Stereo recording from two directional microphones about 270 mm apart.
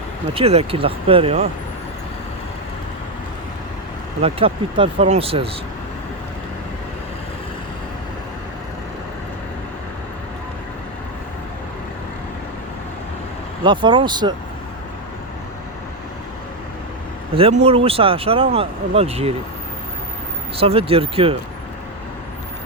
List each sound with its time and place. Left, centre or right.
0.3 s speech: right
4.2 s speech: right
13.7 s speech: centre
17.3 s speech: right
20.6 s speech: right